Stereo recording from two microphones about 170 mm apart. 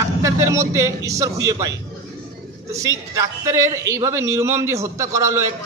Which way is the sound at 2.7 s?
20° right (ahead or behind).